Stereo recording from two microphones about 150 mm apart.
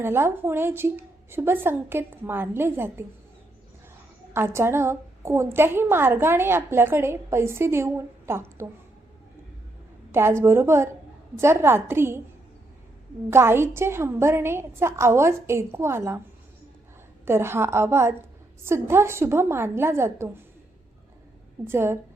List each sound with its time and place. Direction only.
0.0 s a woman's voice: 15° right (ahead or behind)
4.4 s a woman's voice: 15° right (ahead or behind)
10.1 s a woman's voice: 15° right (ahead or behind)
13.3 s a woman's voice: 15° right (ahead or behind)
17.2 s a woman's voice: 15° right (ahead or behind)
21.7 s a woman's voice: 15° right (ahead or behind)